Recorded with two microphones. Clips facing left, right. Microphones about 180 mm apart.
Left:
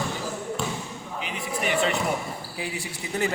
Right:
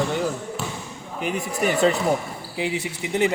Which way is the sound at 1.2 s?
45° right (ahead or behind).